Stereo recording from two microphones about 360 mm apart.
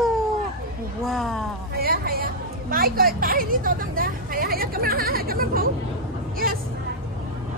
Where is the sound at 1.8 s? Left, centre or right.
Right.